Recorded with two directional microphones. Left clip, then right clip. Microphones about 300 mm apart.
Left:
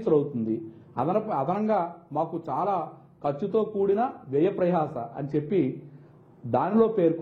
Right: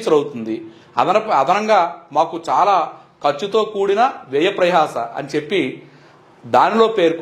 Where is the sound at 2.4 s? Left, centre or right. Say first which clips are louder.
Right 13 dB; centre.